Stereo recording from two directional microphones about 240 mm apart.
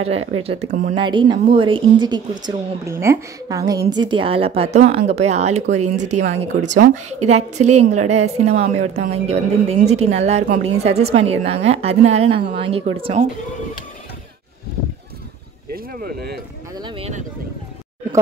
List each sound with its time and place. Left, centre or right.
0.0 s a woman's voice: right
15.7 s speech: right
16.8 s a woman's voice: right